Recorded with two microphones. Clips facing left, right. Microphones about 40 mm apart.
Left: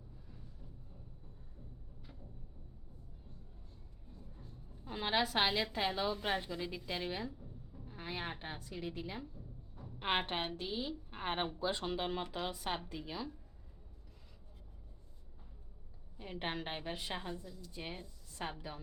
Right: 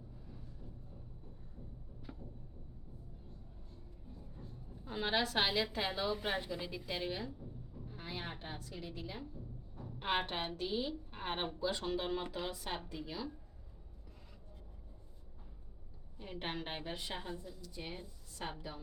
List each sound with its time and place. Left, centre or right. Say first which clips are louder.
4.2 s a sound: right 2 dB; centre
4.9 s a woman's voice: left 1 dB; centre
7.3 s a sound: right 3 dB; centre
7.9 s a woman's voice: left 3 dB; centre
10.5 s a woman's voice: right 2 dB; centre
11.1 s a sound: left 2 dB; centre
11.6 s a woman's voice: even; centre
16.1 s a woman's voice: left 1 dB; centre
17.6 s a woman's voice: even; left